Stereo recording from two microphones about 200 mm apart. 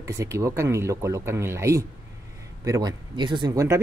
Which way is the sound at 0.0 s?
15° right (ahead or behind).